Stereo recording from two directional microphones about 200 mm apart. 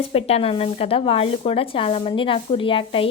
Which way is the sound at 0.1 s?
30° left (ahead or behind).